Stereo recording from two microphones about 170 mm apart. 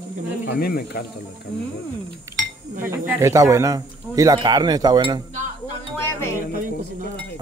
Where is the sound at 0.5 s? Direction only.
65° left (ahead or behind).